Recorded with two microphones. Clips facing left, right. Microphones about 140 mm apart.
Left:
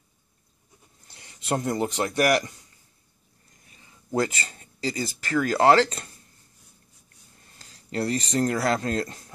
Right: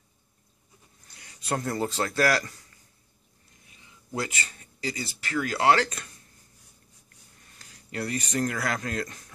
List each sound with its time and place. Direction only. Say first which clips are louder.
1.0 s speech: left 4 dB; 30° left (ahead or behind)
4.1 s speech: left 6 dB; 40° left (ahead or behind)
7.5 s speech: left 5 dB; 35° left (ahead or behind)